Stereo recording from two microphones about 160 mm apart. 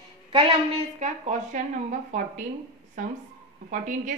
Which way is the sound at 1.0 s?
50° right (ahead or behind).